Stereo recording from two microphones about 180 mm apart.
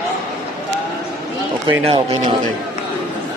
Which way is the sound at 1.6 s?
25° right (ahead or behind).